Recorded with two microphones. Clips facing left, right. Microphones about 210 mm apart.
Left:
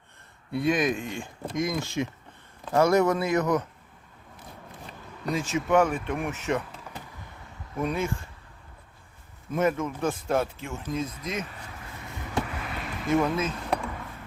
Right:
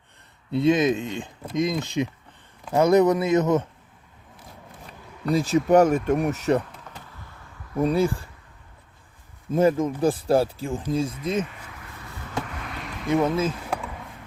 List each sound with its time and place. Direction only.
0.5 s speech: 25° right (ahead or behind)
5.3 s speech: 35° right (ahead or behind)
7.8 s speech: 35° right (ahead or behind)
9.5 s speech: 30° right (ahead or behind)
12.5 s basketball bounce: 5° left (ahead or behind)
13.5 s a sound: 5° right (ahead or behind)